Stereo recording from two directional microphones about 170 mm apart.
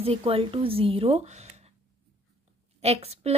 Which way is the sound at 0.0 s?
35° right (ahead or behind).